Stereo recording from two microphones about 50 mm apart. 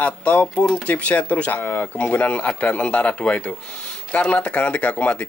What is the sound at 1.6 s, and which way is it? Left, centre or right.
Speech, left.